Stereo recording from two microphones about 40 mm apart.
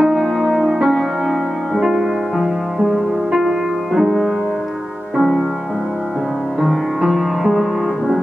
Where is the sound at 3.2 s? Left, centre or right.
Centre.